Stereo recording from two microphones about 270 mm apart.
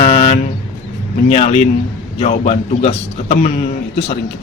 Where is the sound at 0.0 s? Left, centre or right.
Left.